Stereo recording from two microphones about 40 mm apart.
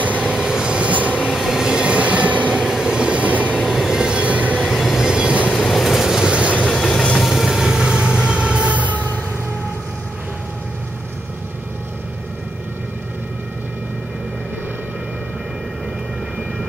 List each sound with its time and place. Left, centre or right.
0.2 s train: centre
0.7 s train: right
1.2 s train: centre
1.9 s train: right
2.7 s train: centre; by 3.5 s right
3.6 s vehicle: centre
4.1 s train: right
4.6 s train: centre
5.0 s train: right
5.5 s train: centre
5.9 s train: centre
6.7 s vehicle: centre
7.2 s train: centre; by 9.0 s right